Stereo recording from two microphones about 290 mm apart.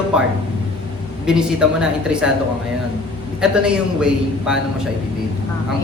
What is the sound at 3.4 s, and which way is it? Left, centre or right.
A man's voice, centre.